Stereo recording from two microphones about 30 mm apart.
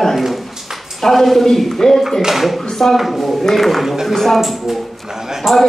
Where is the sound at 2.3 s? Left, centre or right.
Centre.